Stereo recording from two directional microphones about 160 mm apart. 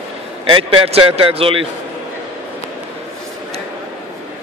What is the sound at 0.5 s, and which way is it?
Speech, 35° right (ahead or behind).